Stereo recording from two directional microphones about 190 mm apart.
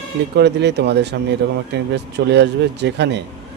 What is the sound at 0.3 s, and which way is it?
Speech, 65° right (ahead or behind).